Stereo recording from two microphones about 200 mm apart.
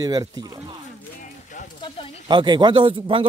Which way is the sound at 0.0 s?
20° right (ahead or behind).